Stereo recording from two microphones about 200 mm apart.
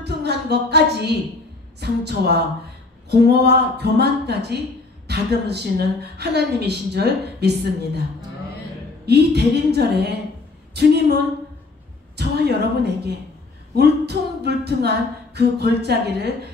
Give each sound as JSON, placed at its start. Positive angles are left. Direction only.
{"t": 0.0, "sound": "a woman's voice", "side_deg": -55}
{"t": 9.0, "sound": "a woman's voice", "side_deg": -55}
{"t": 12.2, "sound": "a woman's voice", "side_deg": -55}